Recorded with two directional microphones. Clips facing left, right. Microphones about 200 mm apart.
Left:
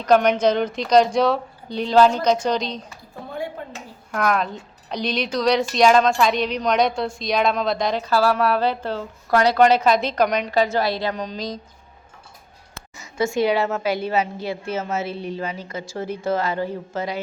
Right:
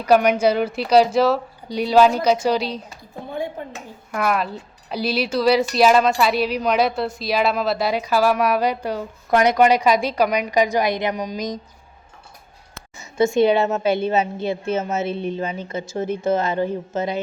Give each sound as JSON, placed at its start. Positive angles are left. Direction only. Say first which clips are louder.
{"t": 0.0, "sound": "speech", "louder": "right 1 dB", "side_deg": -10}
{"t": 3.6, "sound": "a woman's voice", "louder": "right 2 dB", "side_deg": -20}
{"t": 4.1, "sound": "a woman's voice", "louder": "even", "side_deg": -5}
{"t": 13.1, "sound": "a woman's voice", "louder": "right 4 dB", "side_deg": -25}